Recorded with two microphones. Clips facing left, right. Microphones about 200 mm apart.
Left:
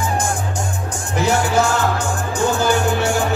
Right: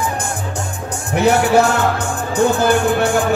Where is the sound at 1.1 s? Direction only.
65° right (ahead or behind).